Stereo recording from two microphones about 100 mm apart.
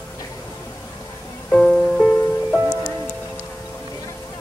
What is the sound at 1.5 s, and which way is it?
Music, 10° left (ahead or behind).